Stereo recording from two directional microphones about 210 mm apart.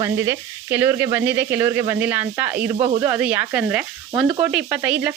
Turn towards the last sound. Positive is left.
turn(degrees=-5)  # may be behind; listen again after turning